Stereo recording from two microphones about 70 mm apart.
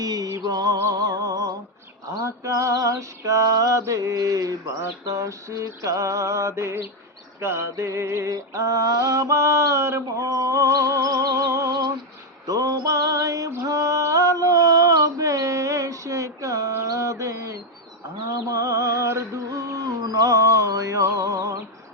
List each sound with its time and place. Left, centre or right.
0.0 s music: right
0.8 s humming: right
2.0 s a sound: right
12.5 s music: right
13.7 s mantra: right
18.4 s a sound: right